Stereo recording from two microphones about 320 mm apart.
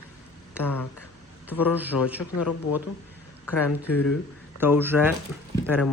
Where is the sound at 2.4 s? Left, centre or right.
Left.